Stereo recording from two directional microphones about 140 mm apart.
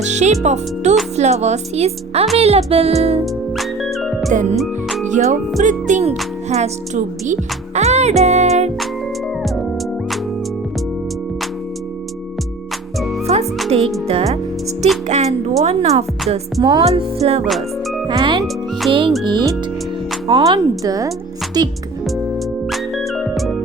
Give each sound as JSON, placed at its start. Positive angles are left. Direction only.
{"t": 0.0, "sound": "speech", "side_deg": -55}
{"t": 3.6, "sound": "music", "side_deg": 0}
{"t": 5.0, "sound": "music", "side_deg": -60}
{"t": 5.6, "sound": "speech", "side_deg": -55}
{"t": 7.8, "sound": "music", "side_deg": -50}
{"t": 13.3, "sound": "music", "side_deg": -50}
{"t": 15.0, "sound": "speech", "side_deg": -50}
{"t": 16.6, "sound": "speech", "side_deg": -30}
{"t": 16.8, "sound": "speech", "side_deg": -45}
{"t": 18.1, "sound": "speech", "side_deg": -30}
{"t": 22.7, "sound": "music", "side_deg": 0}